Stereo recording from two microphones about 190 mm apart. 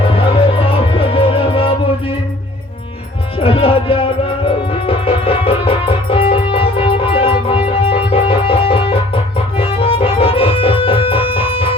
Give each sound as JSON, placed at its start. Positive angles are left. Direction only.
{"t": 0.1, "sound": "music", "side_deg": 30}
{"t": 3.3, "sound": "music", "side_deg": 30}